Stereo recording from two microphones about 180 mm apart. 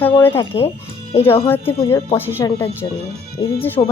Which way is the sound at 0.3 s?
35° left (ahead or behind).